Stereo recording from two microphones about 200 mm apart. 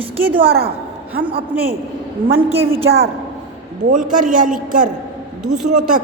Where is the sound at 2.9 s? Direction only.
75° right (ahead or behind).